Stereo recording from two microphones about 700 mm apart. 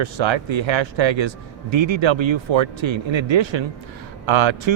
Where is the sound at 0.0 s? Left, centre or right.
Right.